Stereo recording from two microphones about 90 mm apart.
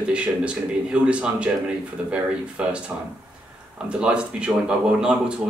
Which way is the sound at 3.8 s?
10° right (ahead or behind).